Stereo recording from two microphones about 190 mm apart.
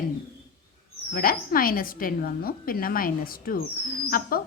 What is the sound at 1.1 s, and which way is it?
A woman's voice, 50° left (ahead or behind).